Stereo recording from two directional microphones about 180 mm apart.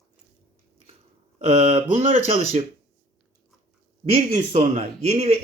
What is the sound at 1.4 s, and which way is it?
Speech, 35° right (ahead or behind).